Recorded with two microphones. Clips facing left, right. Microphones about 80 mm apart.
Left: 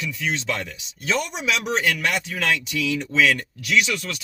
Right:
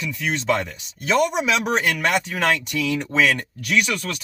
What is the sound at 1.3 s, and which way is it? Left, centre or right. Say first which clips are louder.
Speech: right 4 dB; right.